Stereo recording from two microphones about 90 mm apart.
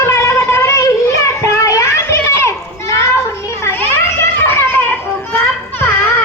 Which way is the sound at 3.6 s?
25° left (ahead or behind).